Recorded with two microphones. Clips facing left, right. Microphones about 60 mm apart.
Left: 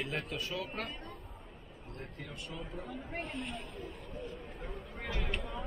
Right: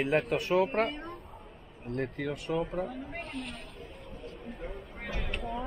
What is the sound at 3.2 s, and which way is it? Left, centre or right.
Speech, centre.